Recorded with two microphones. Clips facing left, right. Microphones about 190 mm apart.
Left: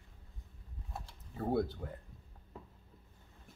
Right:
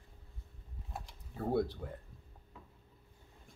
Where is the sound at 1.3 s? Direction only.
Centre (ahead or behind).